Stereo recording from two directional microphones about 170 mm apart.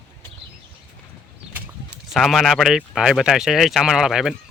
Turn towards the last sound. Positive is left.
turn(degrees=0)  # may be behind; listen again after turning